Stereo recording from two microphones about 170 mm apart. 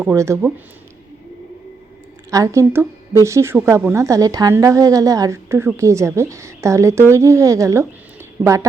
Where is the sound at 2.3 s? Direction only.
20° right (ahead or behind).